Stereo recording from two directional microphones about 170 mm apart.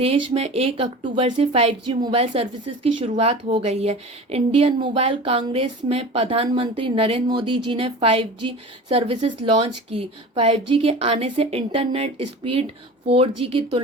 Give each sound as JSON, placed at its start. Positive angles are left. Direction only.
{"t": 0.0, "sound": "a woman's voice", "side_deg": -35}